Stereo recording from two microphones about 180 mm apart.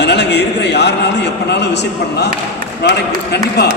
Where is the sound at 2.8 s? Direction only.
65° left (ahead or behind).